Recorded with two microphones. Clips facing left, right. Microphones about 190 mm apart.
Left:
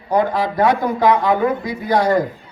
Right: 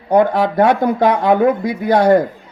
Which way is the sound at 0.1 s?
60° right (ahead or behind).